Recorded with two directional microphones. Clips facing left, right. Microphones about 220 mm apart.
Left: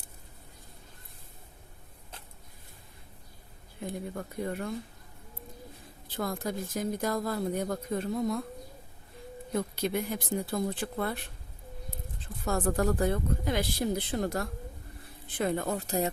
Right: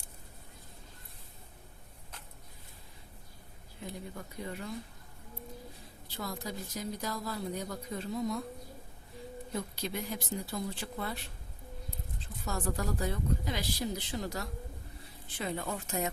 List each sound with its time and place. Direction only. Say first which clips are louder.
3.8 s speech: left 6 dB; 50° left (ahead or behind)
6.1 s speech: left 6 dB; 50° left (ahead or behind)
9.5 s speech: left 8 dB; 55° left (ahead or behind); by 16.0 s 40° left (ahead or behind)